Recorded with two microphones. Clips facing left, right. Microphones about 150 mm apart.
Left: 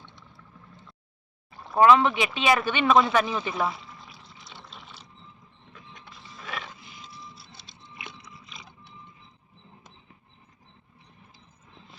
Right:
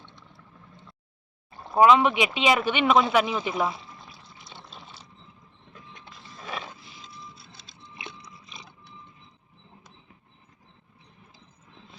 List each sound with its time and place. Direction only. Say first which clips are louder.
1.7 s speech: even; 15° right (ahead or behind)
6.3 s a sound: right 1 dB; 35° right (ahead or behind)
7.9 s biting: right 1 dB; 30° right (ahead or behind)